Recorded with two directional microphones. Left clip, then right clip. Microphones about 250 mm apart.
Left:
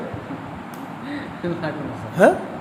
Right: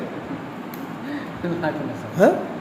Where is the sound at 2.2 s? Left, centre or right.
Centre.